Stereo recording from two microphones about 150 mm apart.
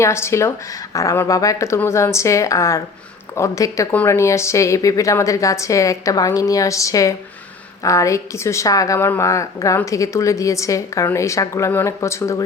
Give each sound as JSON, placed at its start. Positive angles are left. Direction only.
{"t": 0.0, "sound": "a woman's voice", "side_deg": 20}